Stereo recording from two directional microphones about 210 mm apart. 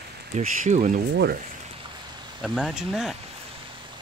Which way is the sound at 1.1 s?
55° right (ahead or behind).